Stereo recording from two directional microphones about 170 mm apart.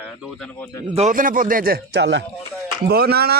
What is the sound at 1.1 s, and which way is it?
Speech, 55° right (ahead or behind).